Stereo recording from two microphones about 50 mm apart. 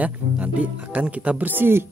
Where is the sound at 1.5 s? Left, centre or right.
Right.